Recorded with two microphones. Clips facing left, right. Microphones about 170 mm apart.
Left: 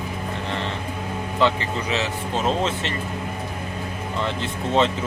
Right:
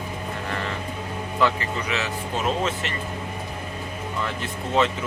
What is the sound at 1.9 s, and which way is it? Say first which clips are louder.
Speech: left 4 dB; 30° left (ahead or behind).